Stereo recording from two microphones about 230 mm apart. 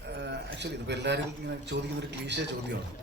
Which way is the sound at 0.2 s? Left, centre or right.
Right.